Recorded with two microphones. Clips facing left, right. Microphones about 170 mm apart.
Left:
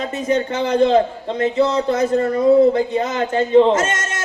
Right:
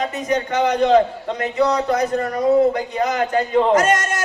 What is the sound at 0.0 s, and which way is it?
A woman's voice, 30° left (ahead or behind).